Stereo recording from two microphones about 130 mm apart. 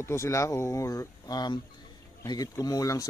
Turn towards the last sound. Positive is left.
turn(degrees=25)  # may be behind; listen again after turning